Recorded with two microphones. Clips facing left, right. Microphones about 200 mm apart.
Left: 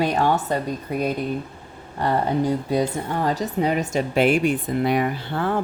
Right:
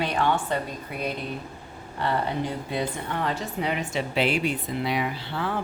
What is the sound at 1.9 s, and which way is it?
Speech, 40° left (ahead or behind).